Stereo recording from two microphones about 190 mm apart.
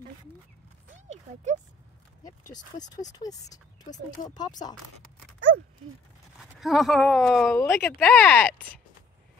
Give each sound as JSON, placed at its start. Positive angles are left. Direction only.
{"t": 0.9, "sound": "clip-clop", "side_deg": -40}
{"t": 2.5, "sound": "speech", "side_deg": 20}
{"t": 6.6, "sound": "speech", "side_deg": 0}
{"t": 7.5, "sound": "speech", "side_deg": 10}